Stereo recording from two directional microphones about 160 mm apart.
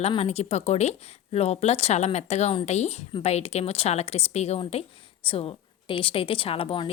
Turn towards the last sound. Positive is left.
turn(degrees=35)  # may be behind; listen again after turning